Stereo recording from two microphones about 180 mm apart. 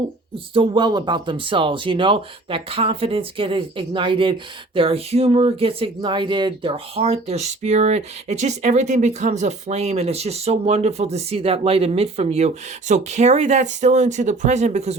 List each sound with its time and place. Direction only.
0.3 s speech: 30° right (ahead or behind)